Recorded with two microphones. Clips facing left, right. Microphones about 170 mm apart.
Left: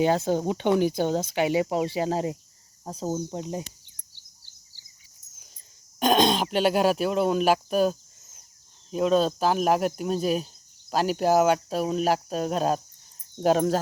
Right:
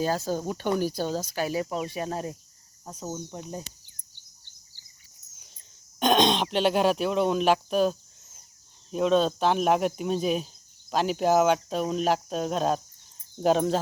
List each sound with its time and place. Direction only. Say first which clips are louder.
0.0 s speech: left 5 dB; 20° left (ahead or behind)
2.8 s speech: left 6 dB; 35° left (ahead or behind)
6.0 s speech: left 1 dB; 5° left (ahead or behind)